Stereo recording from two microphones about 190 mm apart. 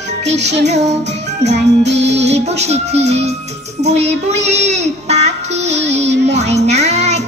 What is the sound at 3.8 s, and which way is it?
Child singing, 35° right (ahead or behind).